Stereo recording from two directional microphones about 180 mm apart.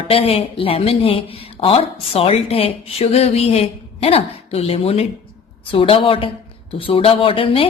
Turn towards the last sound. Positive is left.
turn(degrees=30)  # may be behind; listen again after turning